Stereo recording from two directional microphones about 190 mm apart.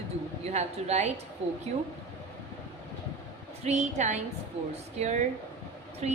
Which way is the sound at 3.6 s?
35° right (ahead or behind).